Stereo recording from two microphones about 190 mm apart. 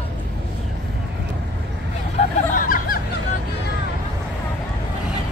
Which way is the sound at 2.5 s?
45° left (ahead or behind).